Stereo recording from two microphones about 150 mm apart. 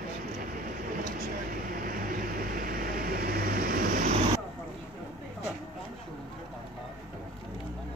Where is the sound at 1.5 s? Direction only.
70° right (ahead or behind); by 4.0 s 90° right.